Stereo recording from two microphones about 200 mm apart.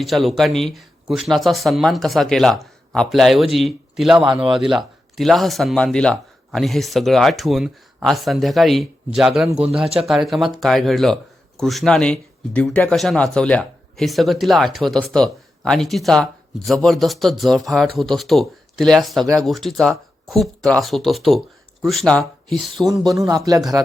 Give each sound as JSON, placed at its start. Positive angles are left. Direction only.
{"t": 0.0, "sound": "speech", "side_deg": 0}
{"t": 19.2, "sound": "speech", "side_deg": -15}
{"t": 19.5, "sound": "speech", "side_deg": 0}
{"t": 23.0, "sound": "speech", "side_deg": -20}